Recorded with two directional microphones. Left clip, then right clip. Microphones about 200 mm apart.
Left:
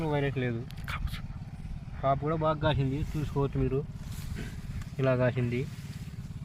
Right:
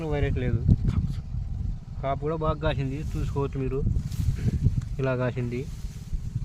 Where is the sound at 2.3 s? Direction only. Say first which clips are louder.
Even; 5° right (ahead or behind).